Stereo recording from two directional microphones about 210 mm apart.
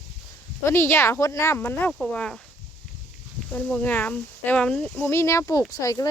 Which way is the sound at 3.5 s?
10° left (ahead or behind).